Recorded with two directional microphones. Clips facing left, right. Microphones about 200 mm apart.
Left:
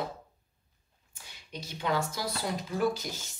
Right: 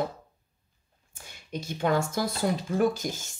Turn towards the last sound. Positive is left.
turn(degrees=-50)  # may be behind; listen again after turning